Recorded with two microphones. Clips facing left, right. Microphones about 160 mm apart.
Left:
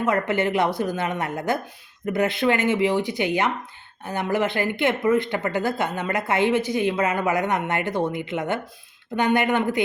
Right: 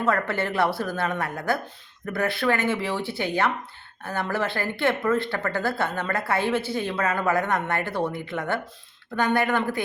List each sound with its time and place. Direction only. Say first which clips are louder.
0.0 s speech: left 3 dB; 20° left (ahead or behind)